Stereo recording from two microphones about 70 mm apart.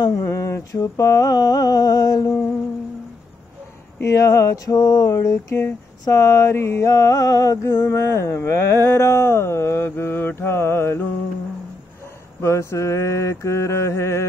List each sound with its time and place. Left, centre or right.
0.0 s mantra: left
4.0 s a sound: left
6.0 s mantra: left
12.4 s mantra: left